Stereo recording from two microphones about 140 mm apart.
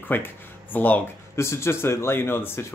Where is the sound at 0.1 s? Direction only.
15° left (ahead or behind).